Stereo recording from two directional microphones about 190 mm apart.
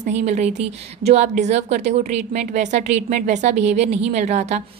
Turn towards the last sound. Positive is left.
turn(degrees=-35)  # may be behind; listen again after turning